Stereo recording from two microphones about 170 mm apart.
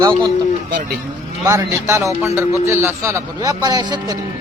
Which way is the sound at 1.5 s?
15° right (ahead or behind).